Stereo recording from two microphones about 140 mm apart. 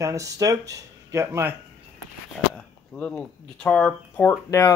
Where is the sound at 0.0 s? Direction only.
25° right (ahead or behind).